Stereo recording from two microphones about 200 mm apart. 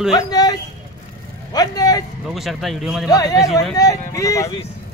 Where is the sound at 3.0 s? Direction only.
20° left (ahead or behind).